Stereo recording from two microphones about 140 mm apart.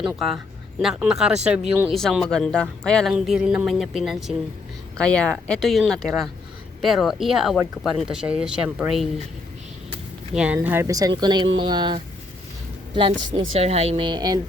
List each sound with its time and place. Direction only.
0.8 s speech: 5° right (ahead or behind)
1.9 s speech: centre (ahead or behind)
10.3 s a woman's voice: 10° right (ahead or behind); by 14.3 s 30° right (ahead or behind)